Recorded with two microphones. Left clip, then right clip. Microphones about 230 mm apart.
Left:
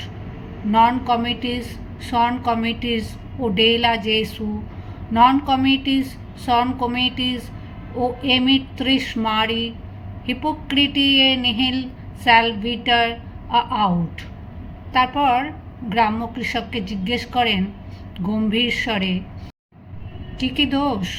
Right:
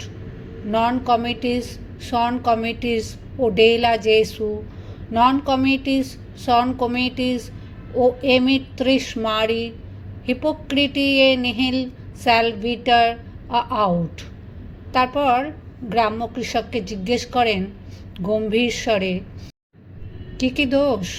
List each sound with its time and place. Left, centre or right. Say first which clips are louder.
0.7 s speech: left 2 dB; right
20.4 s speech: right 2 dB; right